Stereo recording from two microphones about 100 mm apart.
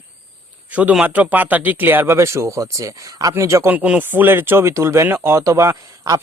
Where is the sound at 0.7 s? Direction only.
15° right (ahead or behind); by 3.7 s 30° right (ahead or behind).